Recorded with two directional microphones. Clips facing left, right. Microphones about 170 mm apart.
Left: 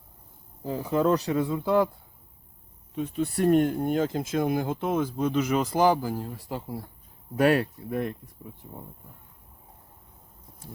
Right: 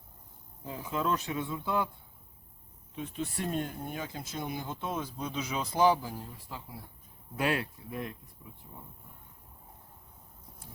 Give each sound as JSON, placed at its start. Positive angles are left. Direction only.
{"t": 0.6, "sound": "speech", "side_deg": 40}
{"t": 2.9, "sound": "speech", "side_deg": 40}
{"t": 3.3, "sound": "speech", "side_deg": 65}
{"t": 6.1, "sound": "speech", "side_deg": 75}
{"t": 7.4, "sound": "speech", "side_deg": 45}